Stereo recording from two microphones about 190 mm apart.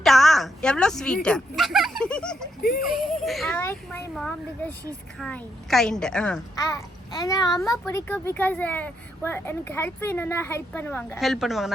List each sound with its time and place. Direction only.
0.0 s a woman's voice: centre (ahead or behind)
3.6 s a woman's voice: 15° left (ahead or behind)
6.6 s a child's voice: 20° left (ahead or behind)
11.2 s a woman's voice: centre (ahead or behind)